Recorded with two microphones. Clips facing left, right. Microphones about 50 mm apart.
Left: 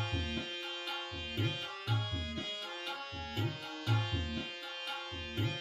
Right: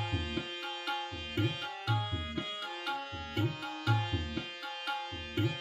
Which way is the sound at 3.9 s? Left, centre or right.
Centre.